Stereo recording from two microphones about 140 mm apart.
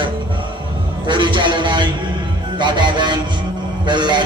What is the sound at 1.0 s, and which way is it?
A man's voice, 35° right (ahead or behind).